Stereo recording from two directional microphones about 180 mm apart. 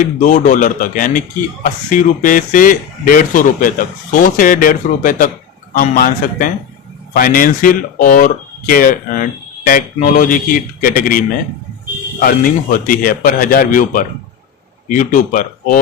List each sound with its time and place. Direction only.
0.0 s speech: 45° left (ahead or behind)
12.7 s speech: 50° left (ahead or behind)